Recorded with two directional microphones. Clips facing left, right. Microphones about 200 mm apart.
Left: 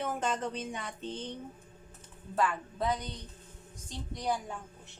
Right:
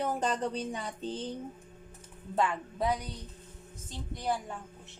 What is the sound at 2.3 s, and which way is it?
A woman's voice, 20° right (ahead or behind).